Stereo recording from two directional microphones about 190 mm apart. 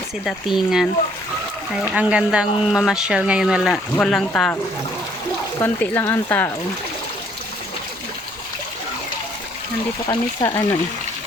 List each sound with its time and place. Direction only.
0.3 s speech: centre (ahead or behind)
1.9 s speech: 5° right (ahead or behind)
5.5 s speech: 10° left (ahead or behind)
10.1 s speech: 20° left (ahead or behind)